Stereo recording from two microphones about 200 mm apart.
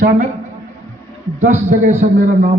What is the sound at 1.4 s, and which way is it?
Speech, 35° right (ahead or behind).